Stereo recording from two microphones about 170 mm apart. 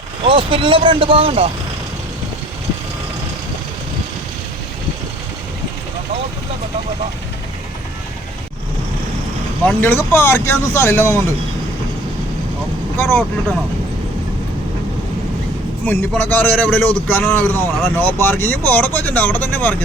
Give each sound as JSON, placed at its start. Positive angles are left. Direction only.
{"t": 0.3, "sound": "speech", "side_deg": -30}
{"t": 9.6, "sound": "a man's voice", "side_deg": 10}
{"t": 13.0, "sound": "a man's voice", "side_deg": 10}
{"t": 15.9, "sound": "a man's voice", "side_deg": 10}